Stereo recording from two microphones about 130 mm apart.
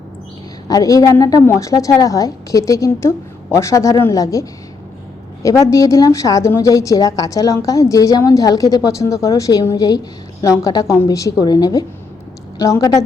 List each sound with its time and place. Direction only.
0.7 s a woman's voice: 30° left (ahead or behind)